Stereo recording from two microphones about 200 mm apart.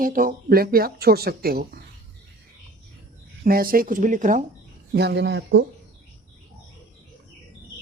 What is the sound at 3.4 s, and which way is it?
Speech, 45° right (ahead or behind).